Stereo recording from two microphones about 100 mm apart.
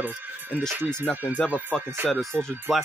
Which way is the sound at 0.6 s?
20° right (ahead or behind).